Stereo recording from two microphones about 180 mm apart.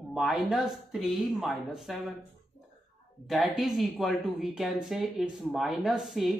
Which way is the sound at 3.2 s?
Centre (ahead or behind).